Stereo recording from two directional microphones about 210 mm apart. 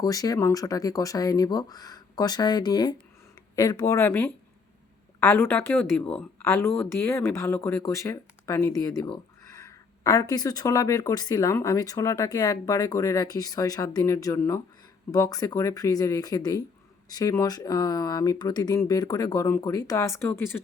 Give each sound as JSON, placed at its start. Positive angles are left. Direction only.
{"t": 0.0, "sound": "speech", "side_deg": 15}